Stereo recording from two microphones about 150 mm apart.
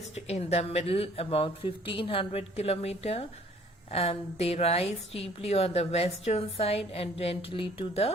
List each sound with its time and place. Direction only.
0.3 s a woman's voice: 45° left (ahead or behind)